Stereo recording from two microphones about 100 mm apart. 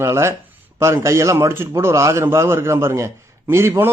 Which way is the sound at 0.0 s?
30° right (ahead or behind).